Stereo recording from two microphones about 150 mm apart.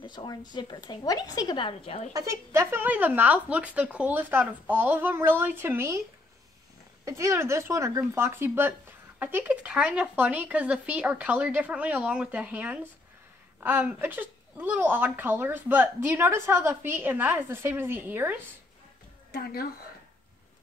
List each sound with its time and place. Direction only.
0.0 s a woman's voice: 30° left (ahead or behind)
2.1 s a woman's voice: 20° right (ahead or behind)
7.1 s a woman's voice: 20° right (ahead or behind)
19.3 s a woman's voice: 90° left